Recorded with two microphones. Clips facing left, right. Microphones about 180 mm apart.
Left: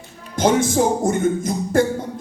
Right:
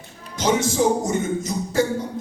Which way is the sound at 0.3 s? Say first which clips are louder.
Left 3 dB; 55° left (ahead or behind).